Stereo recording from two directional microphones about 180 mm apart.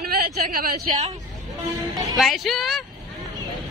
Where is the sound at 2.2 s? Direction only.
Centre (ahead or behind).